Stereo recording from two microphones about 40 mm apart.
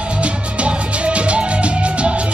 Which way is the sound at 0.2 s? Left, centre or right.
Right.